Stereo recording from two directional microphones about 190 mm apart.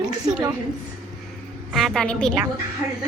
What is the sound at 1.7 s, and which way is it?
Speech, centre (ahead or behind).